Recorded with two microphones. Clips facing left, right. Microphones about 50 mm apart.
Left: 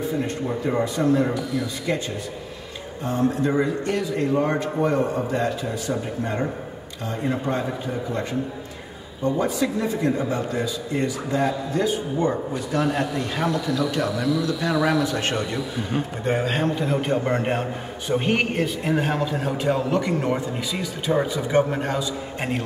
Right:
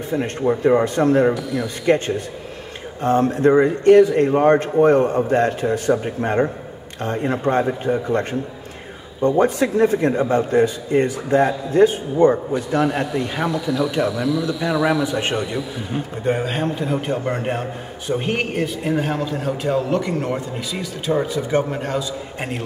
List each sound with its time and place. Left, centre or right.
0.5 s a man's voice: right
0.8 s a man's voice: right
12.8 s speech: centre
15.9 s a man's voice: centre